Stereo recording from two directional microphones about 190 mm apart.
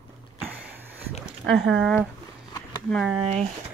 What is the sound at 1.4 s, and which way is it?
Speech, centre (ahead or behind).